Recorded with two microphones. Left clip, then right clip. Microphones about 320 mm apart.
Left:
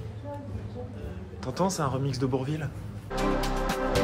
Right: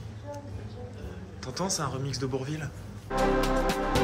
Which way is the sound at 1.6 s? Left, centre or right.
Centre.